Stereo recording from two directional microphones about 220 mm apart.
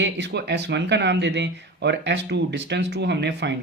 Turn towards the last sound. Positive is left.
turn(degrees=-50)  # may be behind; listen again after turning